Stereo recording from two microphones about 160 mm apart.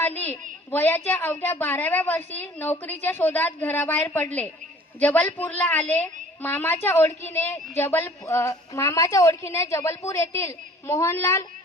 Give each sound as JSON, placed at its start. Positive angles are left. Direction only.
{"t": 0.7, "sound": "a woman's voice", "side_deg": 15}